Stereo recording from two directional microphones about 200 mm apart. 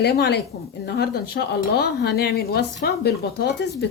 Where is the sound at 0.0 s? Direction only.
55° left (ahead or behind).